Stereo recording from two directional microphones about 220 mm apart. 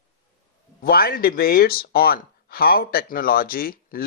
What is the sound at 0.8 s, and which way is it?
Speech, 40° left (ahead or behind).